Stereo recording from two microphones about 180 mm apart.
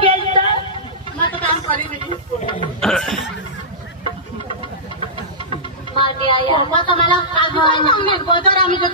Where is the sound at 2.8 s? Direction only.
Centre (ahead or behind).